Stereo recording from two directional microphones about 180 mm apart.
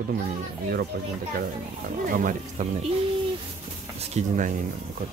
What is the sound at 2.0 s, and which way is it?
Speech, 50° right (ahead or behind).